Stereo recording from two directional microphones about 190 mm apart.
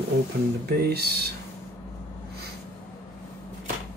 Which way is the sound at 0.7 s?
55° right (ahead or behind).